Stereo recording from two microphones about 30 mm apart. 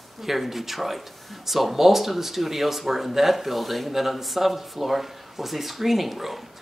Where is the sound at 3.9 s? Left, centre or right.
Centre.